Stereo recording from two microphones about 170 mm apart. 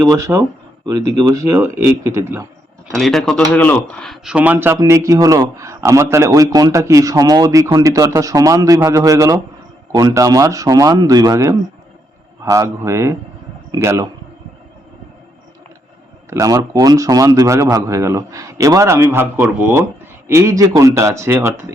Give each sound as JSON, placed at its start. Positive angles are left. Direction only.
{"t": 0.0, "sound": "speech", "side_deg": -20}
{"t": 2.9, "sound": "speech", "side_deg": 0}
{"t": 16.3, "sound": "speech", "side_deg": -20}